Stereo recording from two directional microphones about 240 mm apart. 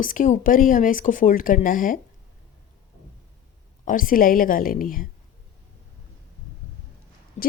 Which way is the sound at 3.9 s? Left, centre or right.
Left.